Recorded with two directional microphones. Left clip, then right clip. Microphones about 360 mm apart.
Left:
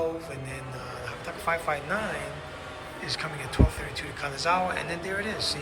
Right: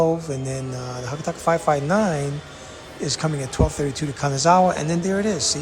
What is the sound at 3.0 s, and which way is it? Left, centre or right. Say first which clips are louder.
Speech: right 7 dB; centre.